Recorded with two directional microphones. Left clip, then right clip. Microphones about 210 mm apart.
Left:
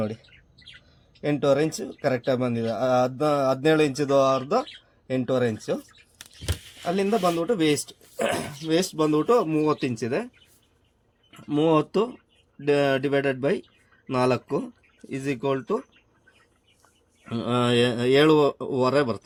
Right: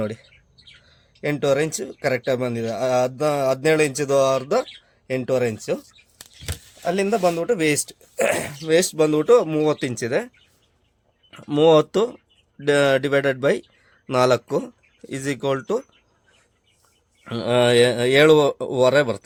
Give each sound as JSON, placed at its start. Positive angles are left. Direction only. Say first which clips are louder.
{"t": 1.2, "sound": "speech", "louder": "right 2 dB", "side_deg": -25}
{"t": 6.8, "sound": "speech", "louder": "right 3 dB", "side_deg": -35}
{"t": 17.2, "sound": "speech", "louder": "right 7 dB", "side_deg": -40}